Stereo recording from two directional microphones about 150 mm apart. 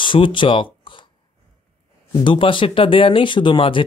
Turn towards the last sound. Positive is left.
turn(degrees=35)  # may be behind; listen again after turning